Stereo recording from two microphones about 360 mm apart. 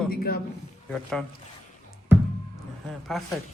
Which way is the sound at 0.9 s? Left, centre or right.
Centre.